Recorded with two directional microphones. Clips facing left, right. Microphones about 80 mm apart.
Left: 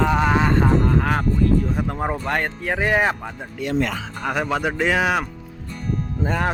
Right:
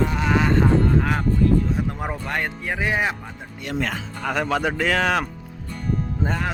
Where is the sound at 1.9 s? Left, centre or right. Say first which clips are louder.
Left 4 dB; left.